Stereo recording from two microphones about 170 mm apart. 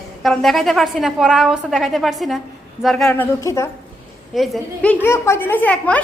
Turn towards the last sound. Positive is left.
turn(degrees=10)  # may be behind; listen again after turning